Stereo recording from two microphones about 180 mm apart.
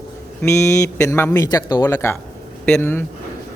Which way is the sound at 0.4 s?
15° left (ahead or behind).